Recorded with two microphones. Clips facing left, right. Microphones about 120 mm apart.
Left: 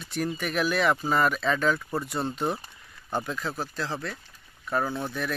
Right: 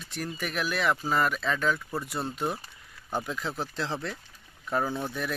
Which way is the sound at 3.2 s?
15° right (ahead or behind).